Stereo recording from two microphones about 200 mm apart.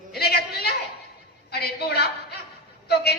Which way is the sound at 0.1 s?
50° left (ahead or behind).